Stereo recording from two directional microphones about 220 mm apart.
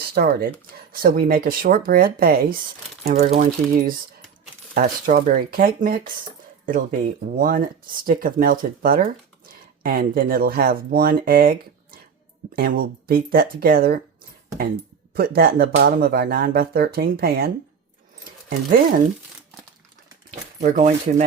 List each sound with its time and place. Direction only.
0.0 s speech: 45° right (ahead or behind)
4.7 s speech: 40° right (ahead or behind)
15.1 s speech: 45° right (ahead or behind)
20.6 s speech: 35° right (ahead or behind)